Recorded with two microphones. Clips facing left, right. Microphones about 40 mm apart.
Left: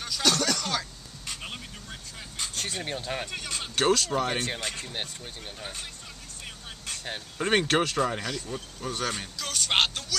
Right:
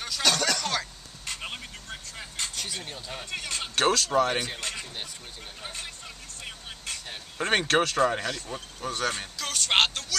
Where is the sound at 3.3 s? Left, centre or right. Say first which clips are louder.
Right 1 dB; centre.